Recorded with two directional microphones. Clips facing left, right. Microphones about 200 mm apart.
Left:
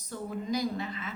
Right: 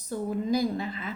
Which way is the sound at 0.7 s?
35° right (ahead or behind).